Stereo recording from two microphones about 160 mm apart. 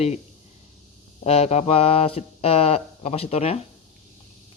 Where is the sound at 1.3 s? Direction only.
40° left (ahead or behind).